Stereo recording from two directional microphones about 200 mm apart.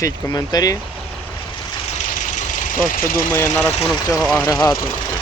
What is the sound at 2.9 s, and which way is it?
Speech, 45° left (ahead or behind).